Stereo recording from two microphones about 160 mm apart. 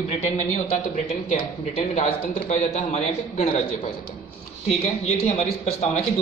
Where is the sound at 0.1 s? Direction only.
40° left (ahead or behind).